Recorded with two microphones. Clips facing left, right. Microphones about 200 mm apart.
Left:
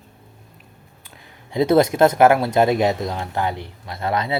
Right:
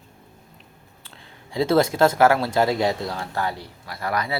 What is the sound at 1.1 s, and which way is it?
Speech, 20° left (ahead or behind).